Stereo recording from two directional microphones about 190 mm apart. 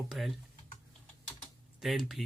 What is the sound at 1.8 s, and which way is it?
Speech, centre (ahead or behind).